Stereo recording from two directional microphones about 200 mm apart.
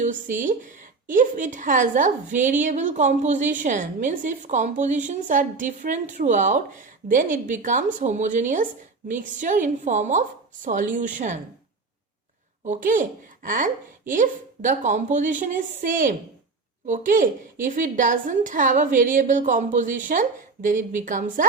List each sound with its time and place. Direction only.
0.0 s a woman's voice: 40° right (ahead or behind)
12.6 s a woman's voice: 40° right (ahead or behind)